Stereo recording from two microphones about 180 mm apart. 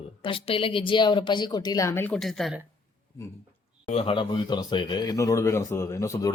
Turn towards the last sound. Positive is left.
turn(degrees=15)  # may be behind; listen again after turning